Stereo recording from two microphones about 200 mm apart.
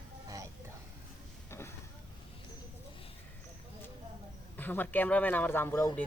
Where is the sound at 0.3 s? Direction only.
15° right (ahead or behind).